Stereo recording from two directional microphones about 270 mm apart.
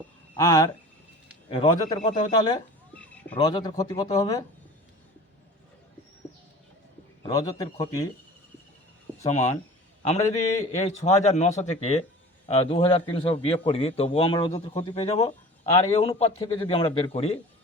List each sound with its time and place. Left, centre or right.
0.3 s a man's voice: centre
3.3 s speech: centre
7.2 s speech: centre
9.2 s a man's voice: left